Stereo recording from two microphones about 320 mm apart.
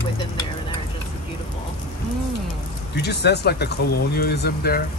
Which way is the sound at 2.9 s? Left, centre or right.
Left.